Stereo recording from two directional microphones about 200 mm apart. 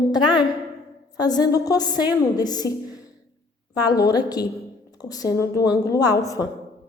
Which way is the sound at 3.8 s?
20° left (ahead or behind).